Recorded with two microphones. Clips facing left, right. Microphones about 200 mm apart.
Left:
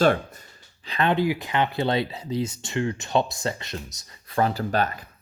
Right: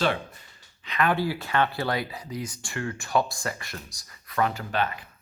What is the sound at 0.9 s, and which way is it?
Speech, 30° left (ahead or behind).